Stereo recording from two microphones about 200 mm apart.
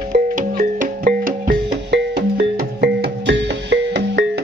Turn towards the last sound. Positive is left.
turn(degrees=-55)  # may be behind; listen again after turning